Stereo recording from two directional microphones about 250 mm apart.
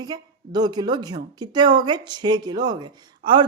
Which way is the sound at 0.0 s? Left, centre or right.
Centre.